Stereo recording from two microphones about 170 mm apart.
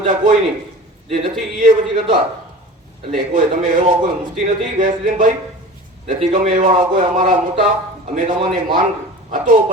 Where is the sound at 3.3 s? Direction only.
50° right (ahead or behind).